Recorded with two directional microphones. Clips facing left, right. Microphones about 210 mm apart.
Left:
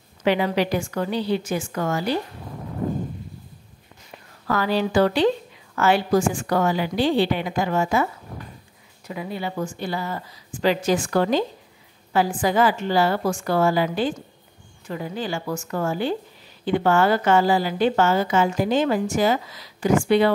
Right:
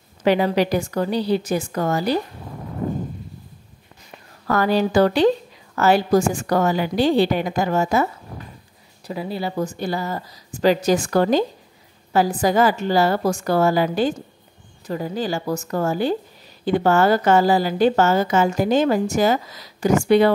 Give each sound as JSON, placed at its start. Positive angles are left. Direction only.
{"t": 0.2, "sound": "a woman's voice", "side_deg": -40}
{"t": 4.5, "sound": "a woman's voice", "side_deg": -45}